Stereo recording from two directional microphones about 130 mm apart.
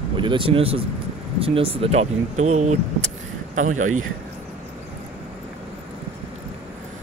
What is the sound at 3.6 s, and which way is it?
Speech, 75° right (ahead or behind).